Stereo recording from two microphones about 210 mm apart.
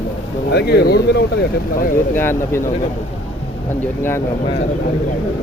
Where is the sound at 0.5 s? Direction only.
50° left (ahead or behind).